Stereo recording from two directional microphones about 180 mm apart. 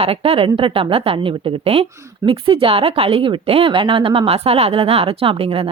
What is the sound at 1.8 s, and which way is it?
Speech, 15° right (ahead or behind).